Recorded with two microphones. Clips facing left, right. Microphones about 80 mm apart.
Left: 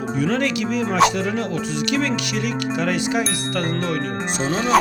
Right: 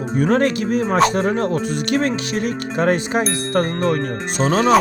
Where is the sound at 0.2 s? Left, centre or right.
Right.